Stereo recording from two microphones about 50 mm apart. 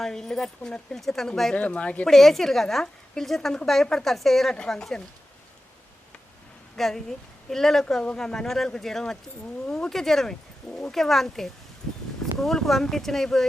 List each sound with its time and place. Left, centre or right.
0.0 s speech: centre
1.5 s speech: left
2.0 s a woman's voice: centre
6.7 s speech: centre